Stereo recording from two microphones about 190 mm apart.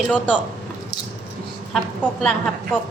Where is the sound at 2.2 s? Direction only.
5° left (ahead or behind).